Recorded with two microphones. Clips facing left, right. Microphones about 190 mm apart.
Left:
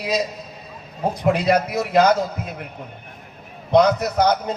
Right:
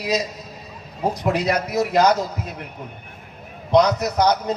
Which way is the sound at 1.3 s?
55° left (ahead or behind).